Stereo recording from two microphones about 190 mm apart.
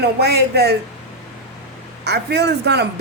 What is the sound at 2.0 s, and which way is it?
Speech, 60° right (ahead or behind).